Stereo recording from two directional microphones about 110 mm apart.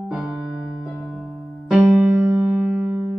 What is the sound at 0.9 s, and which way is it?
Music, centre (ahead or behind).